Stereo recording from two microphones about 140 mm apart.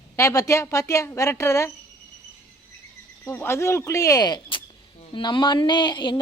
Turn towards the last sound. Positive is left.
turn(degrees=35)  # may be behind; listen again after turning